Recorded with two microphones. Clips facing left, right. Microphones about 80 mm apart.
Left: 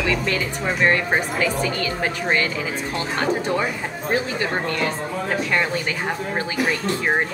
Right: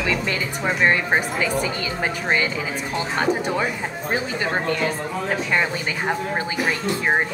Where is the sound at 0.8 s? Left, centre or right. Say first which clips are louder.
Even; centre.